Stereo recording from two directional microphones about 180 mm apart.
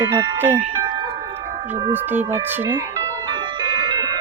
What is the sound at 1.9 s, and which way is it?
Speech, 10° right (ahead or behind).